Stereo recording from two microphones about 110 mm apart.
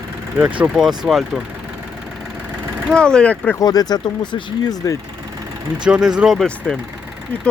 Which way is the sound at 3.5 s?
35° left (ahead or behind).